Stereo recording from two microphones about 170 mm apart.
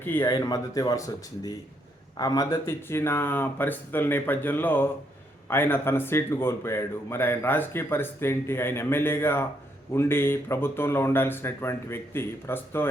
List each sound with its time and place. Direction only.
0.0 s speech: 10° left (ahead or behind)
0.3 s a man's voice: 25° left (ahead or behind)